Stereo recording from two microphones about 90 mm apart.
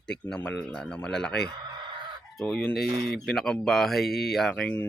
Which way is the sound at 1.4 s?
55° right (ahead or behind).